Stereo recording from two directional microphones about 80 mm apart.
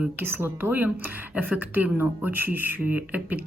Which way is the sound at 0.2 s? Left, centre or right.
Right.